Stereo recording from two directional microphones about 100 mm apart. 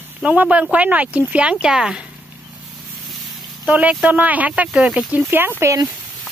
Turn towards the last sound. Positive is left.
turn(degrees=-25)  # may be behind; listen again after turning